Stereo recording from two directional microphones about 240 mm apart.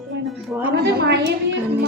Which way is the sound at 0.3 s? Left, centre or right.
Centre.